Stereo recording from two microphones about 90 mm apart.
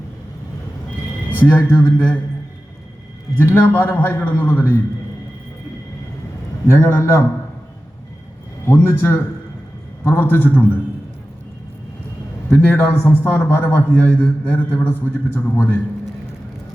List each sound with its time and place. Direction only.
1.4 s a man's voice: 20° left (ahead or behind)
3.3 s a man's voice: 20° left (ahead or behind)
6.7 s a man's voice: 30° left (ahead or behind)
8.6 s a man's voice: 25° left (ahead or behind)
12.5 s a man's voice: 20° left (ahead or behind)